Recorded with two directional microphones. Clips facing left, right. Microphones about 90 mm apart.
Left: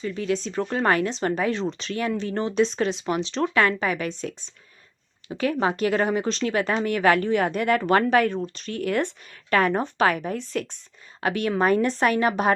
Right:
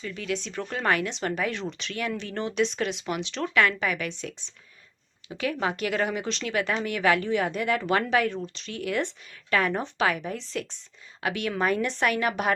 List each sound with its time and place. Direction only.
0.0 s speech: 30° left (ahead or behind); by 10.8 s 50° left (ahead or behind)
11.2 s speech: 40° left (ahead or behind)